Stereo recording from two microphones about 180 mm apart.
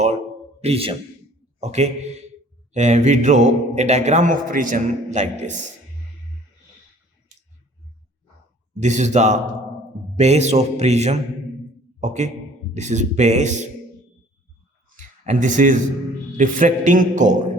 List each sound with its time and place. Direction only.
0.6 s a man's voice: 35° right (ahead or behind)
8.8 s a man's voice: 40° right (ahead or behind)
14.9 s a man's voice: 45° right (ahead or behind)